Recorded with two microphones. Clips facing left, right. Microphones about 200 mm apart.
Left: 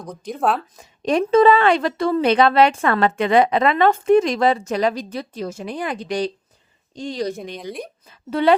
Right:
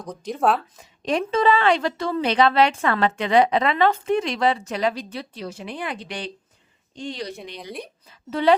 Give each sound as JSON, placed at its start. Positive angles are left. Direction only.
{"t": 0.0, "sound": "speech", "side_deg": 5}
{"t": 0.8, "sound": "a woman's voice", "side_deg": 45}
{"t": 8.3, "sound": "a woman's voice", "side_deg": 60}